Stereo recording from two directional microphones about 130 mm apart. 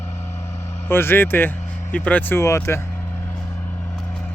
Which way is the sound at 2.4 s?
20° left (ahead or behind).